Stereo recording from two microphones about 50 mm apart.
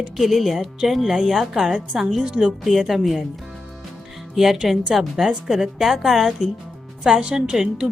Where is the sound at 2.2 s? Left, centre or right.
Centre.